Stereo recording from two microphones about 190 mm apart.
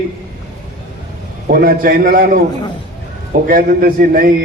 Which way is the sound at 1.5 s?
50° right (ahead or behind).